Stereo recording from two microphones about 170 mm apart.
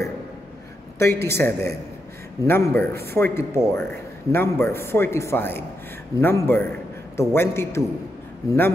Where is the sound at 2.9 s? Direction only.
70° right (ahead or behind).